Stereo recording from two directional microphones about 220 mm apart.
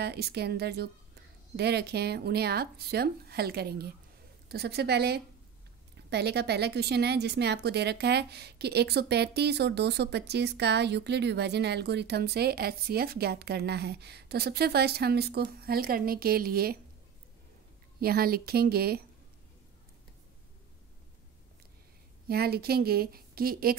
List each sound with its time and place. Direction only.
0.0 s a woman's voice: 50° right (ahead or behind)
18.0 s a woman's voice: 45° right (ahead or behind)
22.3 s a woman's voice: 45° right (ahead or behind)